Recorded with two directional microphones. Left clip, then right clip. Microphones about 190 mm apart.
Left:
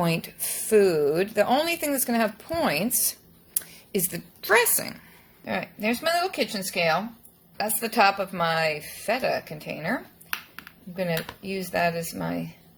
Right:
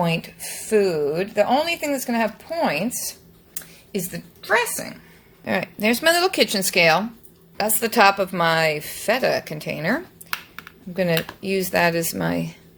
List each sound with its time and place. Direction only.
0.0 s a woman's voice: 20° left (ahead or behind)
4.4 s speech: 35° left (ahead or behind)
5.5 s speech: 30° right (ahead or behind)
7.5 s a woman's voice: 25° right (ahead or behind)